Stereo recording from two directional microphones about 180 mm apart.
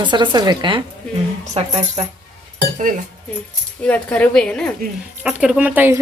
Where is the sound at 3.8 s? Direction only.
10° left (ahead or behind).